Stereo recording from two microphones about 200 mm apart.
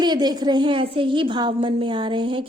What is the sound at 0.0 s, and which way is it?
A woman's voice, 20° right (ahead or behind).